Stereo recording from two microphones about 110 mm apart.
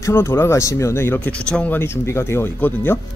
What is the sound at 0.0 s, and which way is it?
Speech, 20° left (ahead or behind).